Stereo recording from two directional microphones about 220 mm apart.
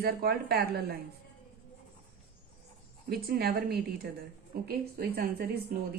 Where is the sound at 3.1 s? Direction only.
45° right (ahead or behind).